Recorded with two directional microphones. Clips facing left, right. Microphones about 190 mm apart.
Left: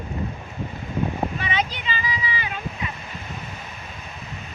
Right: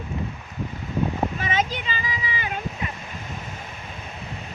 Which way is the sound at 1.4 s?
45° right (ahead or behind).